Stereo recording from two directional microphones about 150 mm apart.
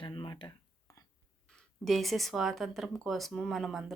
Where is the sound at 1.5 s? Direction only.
Centre (ahead or behind).